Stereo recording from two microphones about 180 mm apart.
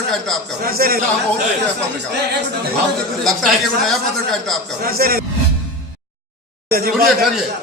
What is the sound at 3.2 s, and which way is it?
A man's voice, centre (ahead or behind).